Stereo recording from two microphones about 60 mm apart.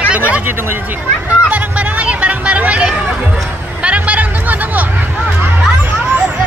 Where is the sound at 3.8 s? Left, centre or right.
Right.